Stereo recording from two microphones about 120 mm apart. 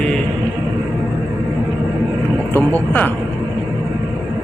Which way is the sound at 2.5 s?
15° left (ahead or behind).